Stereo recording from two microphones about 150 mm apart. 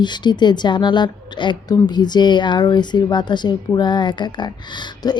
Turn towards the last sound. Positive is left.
turn(degrees=30)  # may be behind; listen again after turning